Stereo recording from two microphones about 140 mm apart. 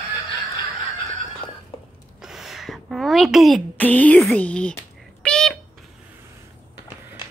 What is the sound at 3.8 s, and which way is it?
Speech, 10° left (ahead or behind).